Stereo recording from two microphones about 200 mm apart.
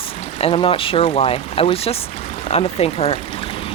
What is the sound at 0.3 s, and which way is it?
Speech, 30° left (ahead or behind).